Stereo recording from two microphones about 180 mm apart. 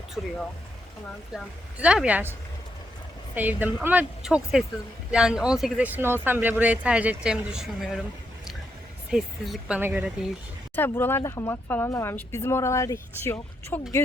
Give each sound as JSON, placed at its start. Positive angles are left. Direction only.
{"t": 0.2, "sound": "speech", "side_deg": 0}
{"t": 1.8, "sound": "speech", "side_deg": -5}
{"t": 3.3, "sound": "speech", "side_deg": -10}
{"t": 9.0, "sound": "speech", "side_deg": 0}
{"t": 10.8, "sound": "a woman's voice", "side_deg": 10}